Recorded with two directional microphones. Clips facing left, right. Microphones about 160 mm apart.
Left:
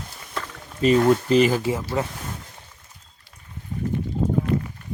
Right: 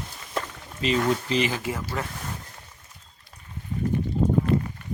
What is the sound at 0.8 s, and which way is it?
Speech, 45° left (ahead or behind).